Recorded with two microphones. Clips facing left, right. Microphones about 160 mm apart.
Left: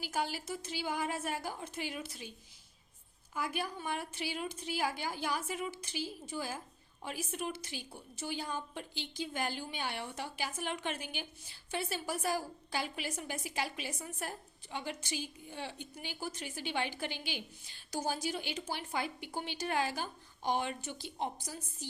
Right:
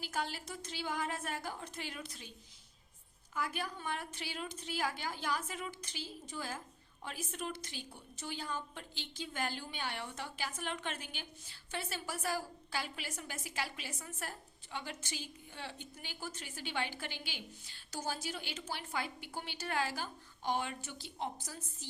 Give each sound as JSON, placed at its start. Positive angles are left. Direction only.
{"t": 0.0, "sound": "a woman's voice", "side_deg": 10}
{"t": 3.3, "sound": "a woman's voice", "side_deg": 10}